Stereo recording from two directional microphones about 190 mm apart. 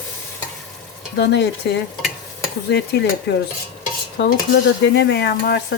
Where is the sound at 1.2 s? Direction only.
60° left (ahead or behind).